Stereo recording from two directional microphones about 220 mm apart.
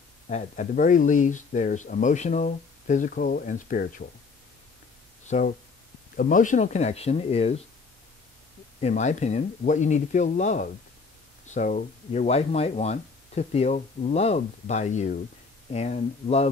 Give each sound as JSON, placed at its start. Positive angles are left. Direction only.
{"t": 0.3, "sound": "speech", "side_deg": 35}
{"t": 5.2, "sound": "a sound", "side_deg": 35}
{"t": 6.1, "sound": "speech", "side_deg": 35}
{"t": 8.8, "sound": "speech", "side_deg": 30}